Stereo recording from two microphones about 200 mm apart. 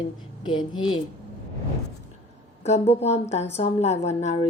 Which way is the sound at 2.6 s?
30° left (ahead or behind).